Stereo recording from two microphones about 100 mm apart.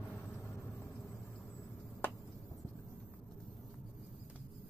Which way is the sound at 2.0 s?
20° left (ahead or behind).